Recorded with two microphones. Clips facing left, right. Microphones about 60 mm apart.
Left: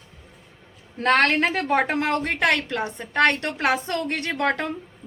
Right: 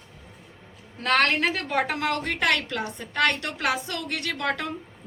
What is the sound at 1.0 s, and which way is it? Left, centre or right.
A woman's voice, left.